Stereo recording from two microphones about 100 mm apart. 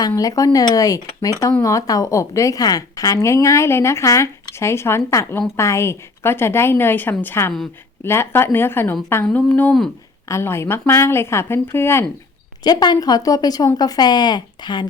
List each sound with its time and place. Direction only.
0.2 s a woman's voice: 35° left (ahead or behind)
5.2 s speech: 15° left (ahead or behind)
5.5 s a woman's voice: 30° left (ahead or behind)
10.2 s a woman's voice: 25° left (ahead or behind)
12.6 s a woman's voice: 45° left (ahead or behind)